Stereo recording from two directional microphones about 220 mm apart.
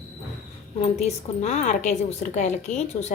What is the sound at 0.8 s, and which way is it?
A woman's voice, 30° left (ahead or behind).